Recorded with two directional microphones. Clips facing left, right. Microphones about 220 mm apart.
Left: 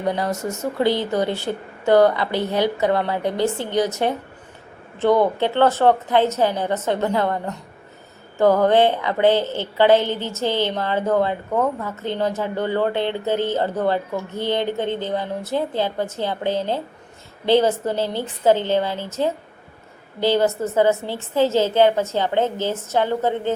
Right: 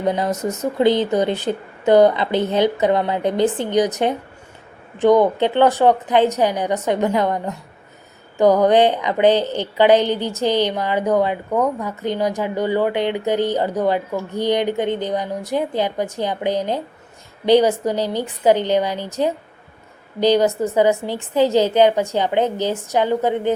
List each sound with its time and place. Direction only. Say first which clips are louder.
0.0 s a woman's voice: right 3 dB; 20° right (ahead or behind)